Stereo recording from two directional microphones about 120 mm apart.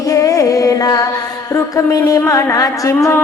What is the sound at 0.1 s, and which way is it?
Music, 25° left (ahead or behind).